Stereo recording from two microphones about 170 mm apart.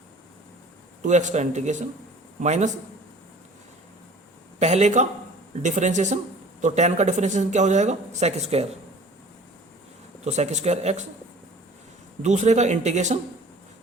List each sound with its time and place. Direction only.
1.0 s speech: 45° right (ahead or behind)
4.6 s speech: 40° right (ahead or behind)
10.2 s speech: 40° right (ahead or behind)
12.2 s speech: 45° right (ahead or behind)